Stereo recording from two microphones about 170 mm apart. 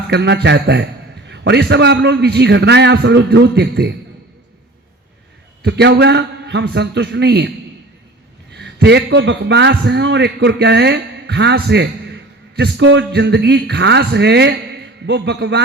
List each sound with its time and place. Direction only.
0.1 s a man's voice: 85° right
5.6 s a man's voice: 75° right (ahead or behind)
8.5 s a man's voice: 85° right